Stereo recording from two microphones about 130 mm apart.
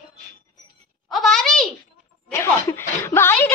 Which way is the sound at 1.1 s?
Centre (ahead or behind).